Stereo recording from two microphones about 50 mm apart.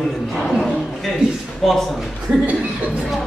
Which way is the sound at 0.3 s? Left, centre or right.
Centre.